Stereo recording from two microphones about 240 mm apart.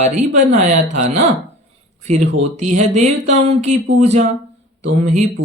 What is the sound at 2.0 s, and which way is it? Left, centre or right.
Speech, right.